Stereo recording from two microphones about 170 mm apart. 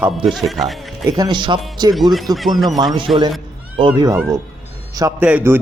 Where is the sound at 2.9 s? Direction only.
30° right (ahead or behind).